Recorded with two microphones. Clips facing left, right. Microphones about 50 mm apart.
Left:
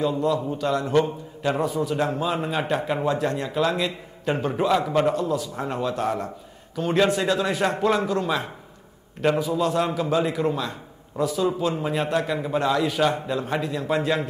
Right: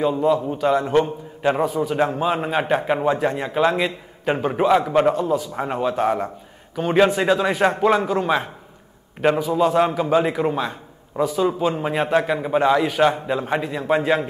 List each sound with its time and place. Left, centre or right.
0.0 s a man's voice: right
3.4 s a man's voice: right
3.7 s a man's voice: centre
10.7 s a sound: centre
11.3 s a man's voice: centre